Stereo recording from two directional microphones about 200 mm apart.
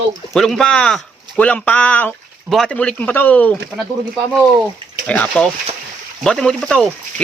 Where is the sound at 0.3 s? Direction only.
Centre (ahead or behind).